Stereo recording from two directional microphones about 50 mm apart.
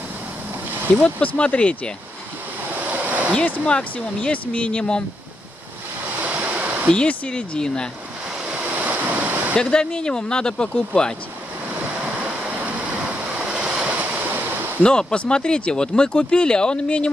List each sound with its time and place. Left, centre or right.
0.9 s speech: left
2.9 s a sound: right
3.6 s speech: centre
6.2 s waves: right
6.9 s speech: centre
8.6 s waves: right
9.6 s speech: centre
12.6 s waves: right
14.8 s speech: centre